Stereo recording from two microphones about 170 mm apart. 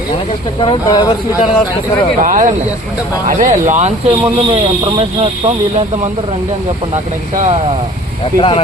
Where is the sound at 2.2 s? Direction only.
50° right (ahead or behind).